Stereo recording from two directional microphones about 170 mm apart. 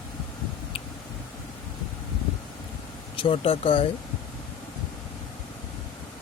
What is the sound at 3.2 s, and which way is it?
Speech, 30° left (ahead or behind).